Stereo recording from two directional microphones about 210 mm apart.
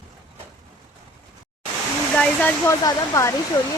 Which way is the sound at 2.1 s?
5° left (ahead or behind).